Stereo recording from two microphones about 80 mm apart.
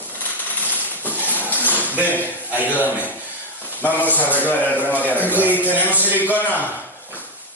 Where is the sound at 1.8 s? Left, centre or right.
Left.